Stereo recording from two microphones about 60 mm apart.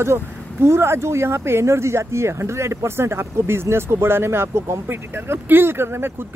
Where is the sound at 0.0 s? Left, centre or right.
Right.